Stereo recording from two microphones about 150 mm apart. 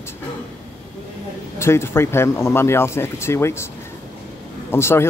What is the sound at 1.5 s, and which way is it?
Speech, 15° left (ahead or behind).